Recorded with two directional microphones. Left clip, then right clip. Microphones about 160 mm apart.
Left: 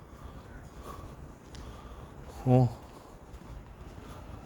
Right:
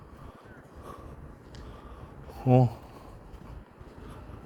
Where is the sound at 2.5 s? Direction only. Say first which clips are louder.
Right 3 dB; 10° right (ahead or behind).